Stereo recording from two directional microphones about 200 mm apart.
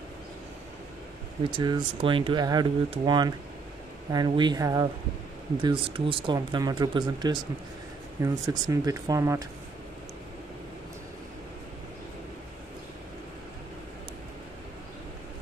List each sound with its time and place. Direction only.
1.6 s speech: 25° right (ahead or behind)